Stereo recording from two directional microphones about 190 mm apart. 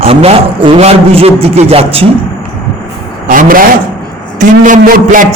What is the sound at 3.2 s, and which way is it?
A man's voice, 45° right (ahead or behind).